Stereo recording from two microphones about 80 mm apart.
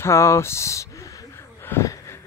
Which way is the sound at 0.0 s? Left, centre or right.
Left.